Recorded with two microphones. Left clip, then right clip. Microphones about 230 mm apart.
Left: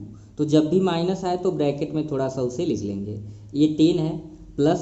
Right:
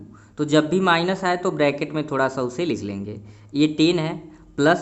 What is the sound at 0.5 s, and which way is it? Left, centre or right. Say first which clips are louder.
Speech: right 3 dB; right.